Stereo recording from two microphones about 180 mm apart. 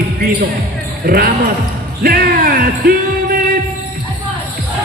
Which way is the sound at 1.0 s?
50° right (ahead or behind).